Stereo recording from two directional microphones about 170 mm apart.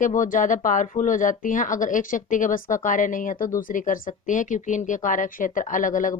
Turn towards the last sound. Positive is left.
turn(degrees=50)  # may be behind; listen again after turning